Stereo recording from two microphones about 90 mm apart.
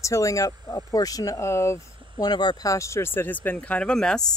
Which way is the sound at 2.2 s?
55° left (ahead or behind).